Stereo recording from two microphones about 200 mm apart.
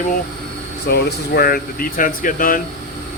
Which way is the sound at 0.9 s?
50° left (ahead or behind).